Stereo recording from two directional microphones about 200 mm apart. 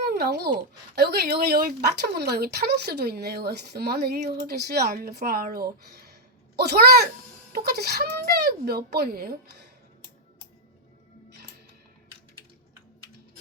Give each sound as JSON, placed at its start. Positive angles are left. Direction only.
{"t": 0.0, "sound": "speech", "side_deg": -55}
{"t": 6.6, "sound": "speech", "side_deg": -50}